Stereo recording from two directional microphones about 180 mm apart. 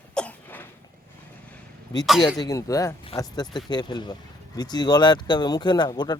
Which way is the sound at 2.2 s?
20° left (ahead or behind).